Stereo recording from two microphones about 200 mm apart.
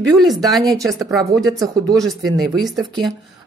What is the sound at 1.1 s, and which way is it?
Speech, centre (ahead or behind).